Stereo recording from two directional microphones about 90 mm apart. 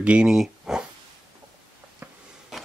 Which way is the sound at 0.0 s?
10° right (ahead or behind).